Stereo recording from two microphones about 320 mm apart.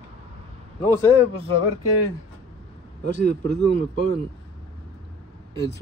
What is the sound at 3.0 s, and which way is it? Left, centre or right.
Speech, right.